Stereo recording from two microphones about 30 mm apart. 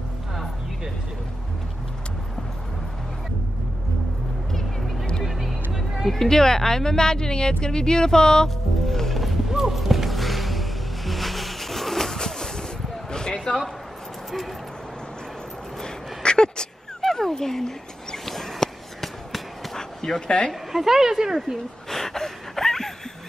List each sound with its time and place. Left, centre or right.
4.5 s music: centre
5.2 s music: centre
6.1 s speech: centre
8.8 s music: centre
9.6 s music: centre
13.1 s a sound: left
15.8 s a sound: left
17.0 s a sound: centre
19.8 s dog: left
20.2 s speech: left
20.7 s speech: centre
21.8 s a sound: centre